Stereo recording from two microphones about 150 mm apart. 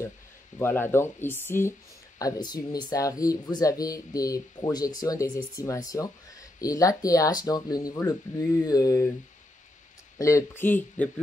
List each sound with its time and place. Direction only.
0.6 s speech: 15° left (ahead or behind)
10.1 s speech: 20° left (ahead or behind)